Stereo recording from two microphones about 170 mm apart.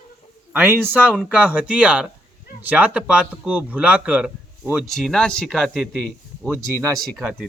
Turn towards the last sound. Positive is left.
turn(degrees=-5)  # may be behind; listen again after turning